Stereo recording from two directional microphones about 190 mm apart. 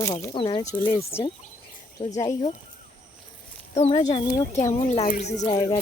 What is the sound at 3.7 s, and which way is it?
Speech, 30° left (ahead or behind).